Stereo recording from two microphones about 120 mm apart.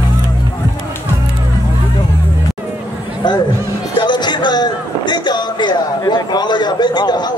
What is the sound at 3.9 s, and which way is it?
Speech, 40° left (ahead or behind).